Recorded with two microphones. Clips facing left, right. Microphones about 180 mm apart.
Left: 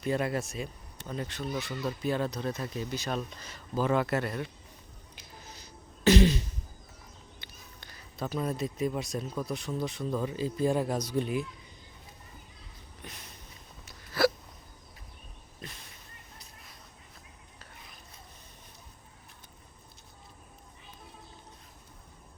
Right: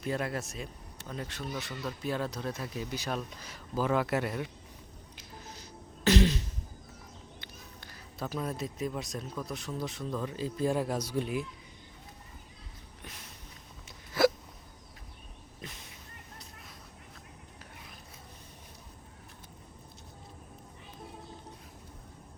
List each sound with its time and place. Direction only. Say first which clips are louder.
0.0 s speech: left 3 dB; centre (ahead or behind)
5.1 s throat clearing: right 2 dB; centre (ahead or behind)
7.8 s speech: left 2 dB; 5° right (ahead or behind)
13.0 s a sound: left 2 dB; 5° right (ahead or behind)
14.1 s hiccup: right 1 dB; 20° right (ahead or behind)
15.6 s a sound: even; 20° right (ahead or behind)